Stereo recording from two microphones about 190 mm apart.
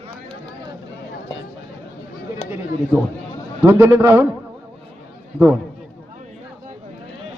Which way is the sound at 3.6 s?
15° right (ahead or behind).